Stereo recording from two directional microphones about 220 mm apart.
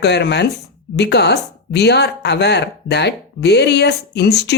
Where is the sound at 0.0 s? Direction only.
50° left (ahead or behind).